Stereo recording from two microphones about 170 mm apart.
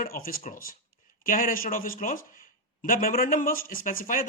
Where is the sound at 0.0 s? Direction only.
55° left (ahead or behind).